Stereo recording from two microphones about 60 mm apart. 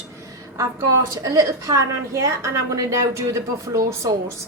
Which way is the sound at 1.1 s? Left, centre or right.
Right.